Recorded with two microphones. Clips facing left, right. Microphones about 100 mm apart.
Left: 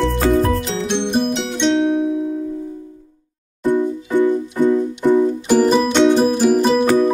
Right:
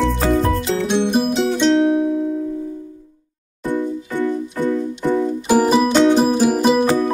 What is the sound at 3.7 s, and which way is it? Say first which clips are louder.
Music: left 4 dB; 15° left (ahead or behind).